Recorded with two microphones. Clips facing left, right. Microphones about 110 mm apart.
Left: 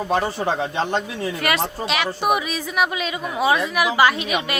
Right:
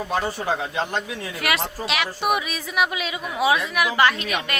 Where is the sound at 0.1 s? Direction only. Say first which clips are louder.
Left 3 dB; 30° left (ahead or behind).